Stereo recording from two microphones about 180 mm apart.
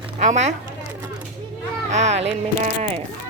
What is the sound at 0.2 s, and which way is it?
Speech, 40° right (ahead or behind).